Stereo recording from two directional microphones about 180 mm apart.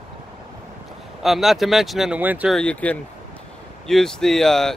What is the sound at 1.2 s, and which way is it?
Speech, centre (ahead or behind).